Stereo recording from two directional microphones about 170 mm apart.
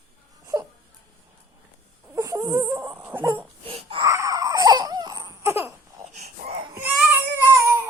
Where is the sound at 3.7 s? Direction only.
35° right (ahead or behind).